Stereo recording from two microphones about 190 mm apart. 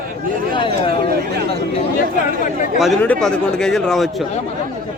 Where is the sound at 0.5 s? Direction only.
25° left (ahead or behind).